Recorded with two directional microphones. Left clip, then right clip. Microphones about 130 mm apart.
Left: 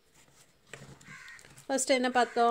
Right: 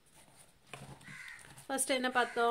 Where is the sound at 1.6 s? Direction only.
30° left (ahead or behind).